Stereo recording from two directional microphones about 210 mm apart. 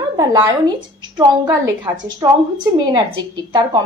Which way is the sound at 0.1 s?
15° right (ahead or behind).